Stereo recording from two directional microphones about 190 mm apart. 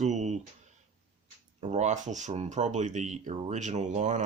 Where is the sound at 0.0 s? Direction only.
40° right (ahead or behind).